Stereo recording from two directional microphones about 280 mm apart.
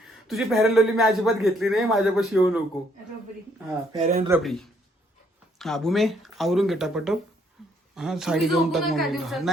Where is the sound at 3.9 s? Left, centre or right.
Right.